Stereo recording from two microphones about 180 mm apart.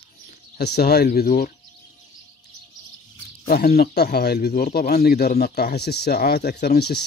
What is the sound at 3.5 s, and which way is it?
Speech, 60° left (ahead or behind).